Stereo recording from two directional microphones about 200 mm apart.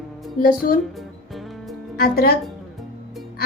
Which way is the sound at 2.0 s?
50° left (ahead or behind).